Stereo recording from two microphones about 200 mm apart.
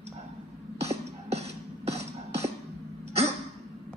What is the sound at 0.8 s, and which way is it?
Music, 30° right (ahead or behind).